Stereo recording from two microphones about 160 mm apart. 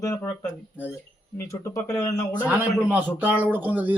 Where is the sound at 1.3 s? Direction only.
20° left (ahead or behind).